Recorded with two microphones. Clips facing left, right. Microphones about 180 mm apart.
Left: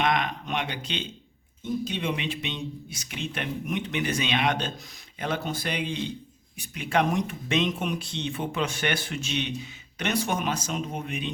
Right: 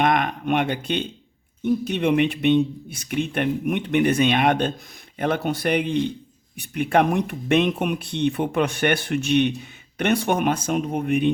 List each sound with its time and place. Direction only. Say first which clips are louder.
0.0 s speech: right 5 dB; 55° right (ahead or behind)